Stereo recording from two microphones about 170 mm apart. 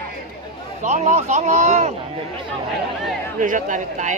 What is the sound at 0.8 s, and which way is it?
Speech, 45° right (ahead or behind).